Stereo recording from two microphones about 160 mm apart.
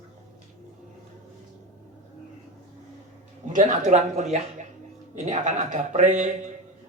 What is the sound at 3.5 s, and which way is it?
Speech, 50° right (ahead or behind).